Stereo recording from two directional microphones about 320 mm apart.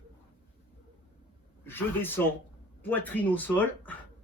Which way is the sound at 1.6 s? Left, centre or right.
Centre.